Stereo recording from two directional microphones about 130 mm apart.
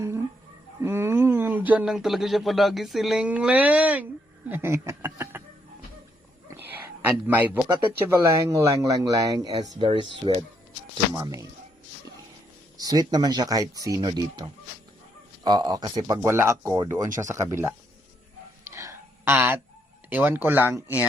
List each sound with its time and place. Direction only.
0.8 s speech: 20° right (ahead or behind)
6.5 s a sound: 20° right (ahead or behind)
8.0 s speech: 20° right (ahead or behind); by 10.4 s 40° right (ahead or behind)
11.1 s speech: 25° right (ahead or behind)
12.7 s speech: 30° right (ahead or behind)
18.6 s a sound: 20° right (ahead or behind)
20.1 s speech: 15° right (ahead or behind)